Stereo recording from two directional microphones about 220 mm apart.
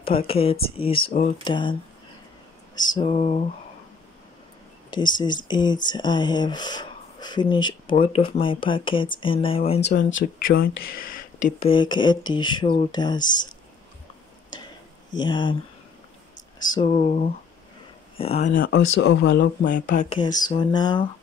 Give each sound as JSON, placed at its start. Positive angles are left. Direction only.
{"t": 0.3, "sound": "speech", "side_deg": 25}
{"t": 4.9, "sound": "speech", "side_deg": 20}
{"t": 9.8, "sound": "speech", "side_deg": 50}
{"t": 10.4, "sound": "speech", "side_deg": 40}
{"t": 11.6, "sound": "speech", "side_deg": 20}
{"t": 13.2, "sound": "speech", "side_deg": 35}
{"t": 15.1, "sound": "speech", "side_deg": 20}
{"t": 16.3, "sound": "speech", "side_deg": 35}
{"t": 18.9, "sound": "speech", "side_deg": 55}
{"t": 19.7, "sound": "speech", "side_deg": 35}
{"t": 20.1, "sound": "speech", "side_deg": 20}